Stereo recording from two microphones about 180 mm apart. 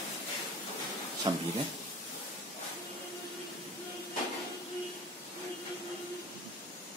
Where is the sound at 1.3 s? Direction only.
25° right (ahead or behind).